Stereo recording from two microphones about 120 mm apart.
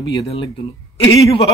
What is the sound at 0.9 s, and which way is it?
Speech, 50° left (ahead or behind).